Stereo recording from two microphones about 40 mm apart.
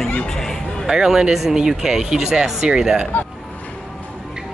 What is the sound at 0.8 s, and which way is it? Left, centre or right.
Speech, centre.